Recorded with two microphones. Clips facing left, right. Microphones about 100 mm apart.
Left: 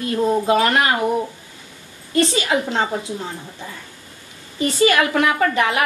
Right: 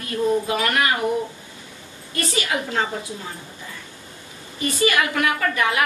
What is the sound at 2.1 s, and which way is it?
Speech, 25° left (ahead or behind).